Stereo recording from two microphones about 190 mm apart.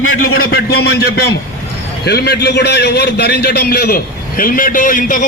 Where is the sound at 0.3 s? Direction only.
55° left (ahead or behind).